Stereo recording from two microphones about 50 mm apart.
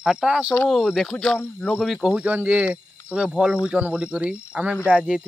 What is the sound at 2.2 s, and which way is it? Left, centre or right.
Speech, right.